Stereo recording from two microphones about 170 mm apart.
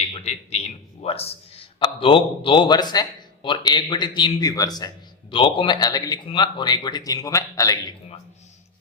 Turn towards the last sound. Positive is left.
turn(degrees=20)  # may be behind; listen again after turning